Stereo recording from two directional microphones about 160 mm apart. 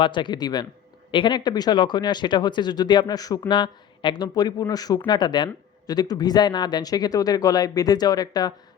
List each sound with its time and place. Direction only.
0.0 s speech: 30° left (ahead or behind)